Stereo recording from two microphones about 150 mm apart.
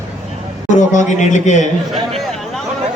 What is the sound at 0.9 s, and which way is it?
Speech, 55° left (ahead or behind).